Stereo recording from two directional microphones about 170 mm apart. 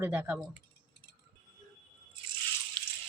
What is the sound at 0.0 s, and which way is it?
Speech, 10° right (ahead or behind).